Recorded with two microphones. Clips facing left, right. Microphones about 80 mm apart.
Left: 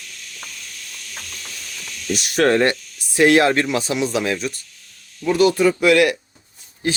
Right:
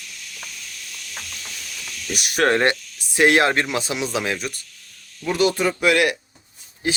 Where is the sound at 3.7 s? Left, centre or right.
Centre.